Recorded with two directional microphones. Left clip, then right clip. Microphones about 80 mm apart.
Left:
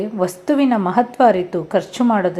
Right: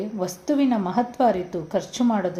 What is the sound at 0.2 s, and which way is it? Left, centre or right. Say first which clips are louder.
A woman's voice: left 6 dB; left.